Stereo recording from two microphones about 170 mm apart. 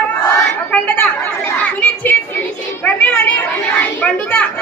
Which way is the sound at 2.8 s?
10° left (ahead or behind).